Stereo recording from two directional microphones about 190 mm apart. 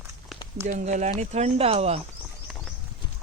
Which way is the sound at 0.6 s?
40° right (ahead or behind).